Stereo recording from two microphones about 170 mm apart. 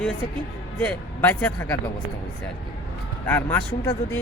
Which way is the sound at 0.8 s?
10° left (ahead or behind).